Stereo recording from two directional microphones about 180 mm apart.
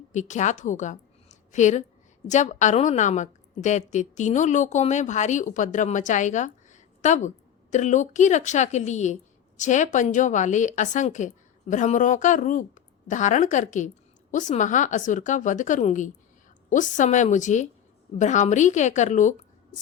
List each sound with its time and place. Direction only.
0.1 s a woman's voice: 40° left (ahead or behind)